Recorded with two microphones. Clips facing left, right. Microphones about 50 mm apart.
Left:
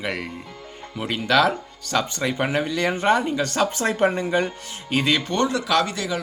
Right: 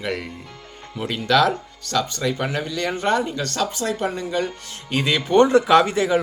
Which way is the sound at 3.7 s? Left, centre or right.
Left.